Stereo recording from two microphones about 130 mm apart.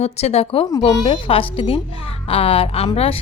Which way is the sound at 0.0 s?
55° left (ahead or behind).